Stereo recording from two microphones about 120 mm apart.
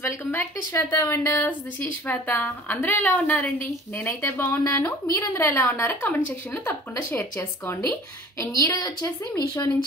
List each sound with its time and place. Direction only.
0.0 s a woman's voice: 20° left (ahead or behind)